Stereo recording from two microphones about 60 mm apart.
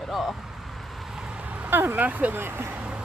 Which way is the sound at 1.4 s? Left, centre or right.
Right.